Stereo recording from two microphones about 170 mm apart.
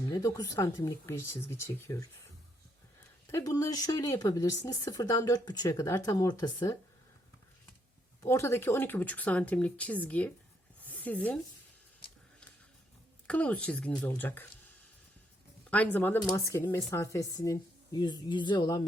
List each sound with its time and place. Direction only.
0.1 s speech: 20° left (ahead or behind)
3.2 s speech: 20° left (ahead or behind)
8.2 s speech: 15° left (ahead or behind)
10.8 s a sound: 10° left (ahead or behind)
13.2 s speech: 10° left (ahead or behind)
15.7 s speech: 10° left (ahead or behind); by 18.8 s 25° left (ahead or behind)